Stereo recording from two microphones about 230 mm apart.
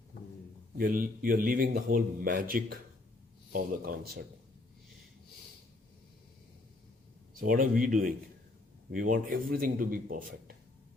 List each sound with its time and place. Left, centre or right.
0.8 s a man's voice: right
7.3 s a man's voice: right